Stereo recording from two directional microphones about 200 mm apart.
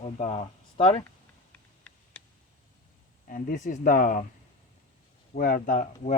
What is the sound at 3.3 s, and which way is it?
Speech, 40° left (ahead or behind).